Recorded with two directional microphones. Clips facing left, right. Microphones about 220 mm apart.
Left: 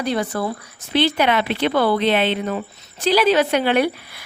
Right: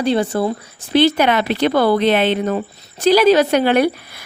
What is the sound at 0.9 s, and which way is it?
Speech, 45° right (ahead or behind).